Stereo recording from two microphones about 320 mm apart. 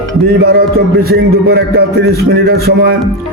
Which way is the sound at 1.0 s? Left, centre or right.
Right.